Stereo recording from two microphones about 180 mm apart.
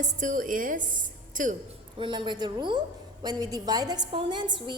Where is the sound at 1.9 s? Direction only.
25° right (ahead or behind).